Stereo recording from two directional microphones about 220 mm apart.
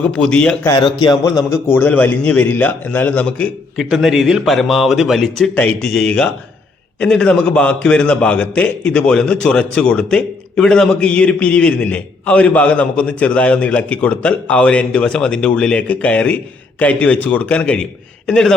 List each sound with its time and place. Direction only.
0.0 s a man's voice: 5° left (ahead or behind)
0.7 s speech: 20° left (ahead or behind)
1.6 s a man's voice: 10° left (ahead or behind)